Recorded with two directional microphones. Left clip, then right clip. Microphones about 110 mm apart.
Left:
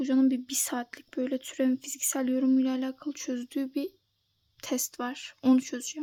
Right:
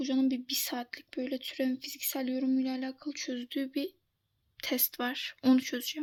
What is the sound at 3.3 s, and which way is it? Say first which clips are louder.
Speech: left 3 dB; 50° left (ahead or behind).